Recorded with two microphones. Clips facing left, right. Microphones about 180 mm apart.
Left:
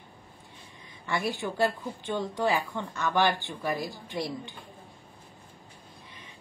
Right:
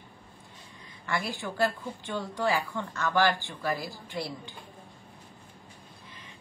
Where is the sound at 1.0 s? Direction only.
20° left (ahead or behind).